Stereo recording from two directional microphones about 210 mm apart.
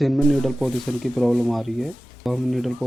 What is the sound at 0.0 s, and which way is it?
Speech, centre (ahead or behind).